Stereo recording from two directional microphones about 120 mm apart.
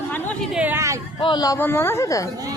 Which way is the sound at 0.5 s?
15° right (ahead or behind).